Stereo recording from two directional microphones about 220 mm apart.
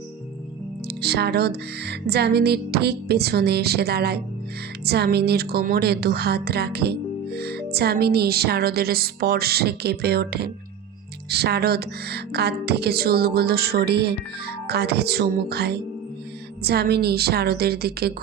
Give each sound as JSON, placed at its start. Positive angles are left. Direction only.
{"t": 0.9, "sound": "a woman's voice", "side_deg": -50}